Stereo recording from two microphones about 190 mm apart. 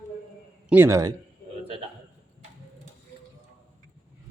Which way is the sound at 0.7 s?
15° right (ahead or behind).